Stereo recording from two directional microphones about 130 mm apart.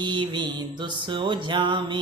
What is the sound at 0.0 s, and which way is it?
Mantra, 35° right (ahead or behind).